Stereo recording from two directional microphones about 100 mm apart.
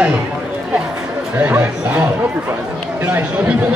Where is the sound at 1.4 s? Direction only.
15° right (ahead or behind).